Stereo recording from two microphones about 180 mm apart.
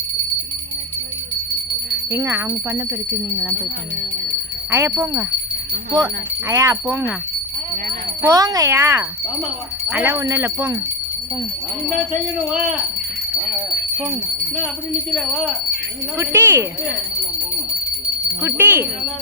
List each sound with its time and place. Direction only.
2.0 s speech: 15° right (ahead or behind)
4.7 s speech: 15° right (ahead or behind)
8.2 s speech: 20° right (ahead or behind)
15.1 s speech: 5° right (ahead or behind)
18.4 s speech: 10° right (ahead or behind)